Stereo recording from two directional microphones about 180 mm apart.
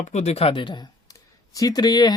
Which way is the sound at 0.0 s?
40° left (ahead or behind).